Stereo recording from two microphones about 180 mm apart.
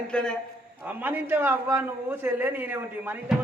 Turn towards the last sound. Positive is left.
turn(degrees=-10)  # may be behind; listen again after turning